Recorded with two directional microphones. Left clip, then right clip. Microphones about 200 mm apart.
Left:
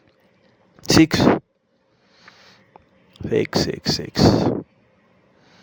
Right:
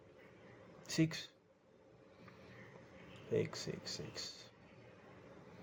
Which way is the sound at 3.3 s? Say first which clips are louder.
Left 19 dB; 50° left (ahead or behind).